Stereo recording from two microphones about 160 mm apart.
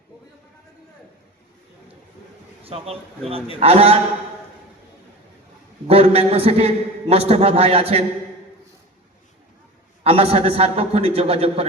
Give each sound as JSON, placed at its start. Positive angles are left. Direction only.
{"t": 2.6, "sound": "a man's voice", "side_deg": -40}
{"t": 5.9, "sound": "a man's voice", "side_deg": -40}
{"t": 10.0, "sound": "a man's voice", "side_deg": -40}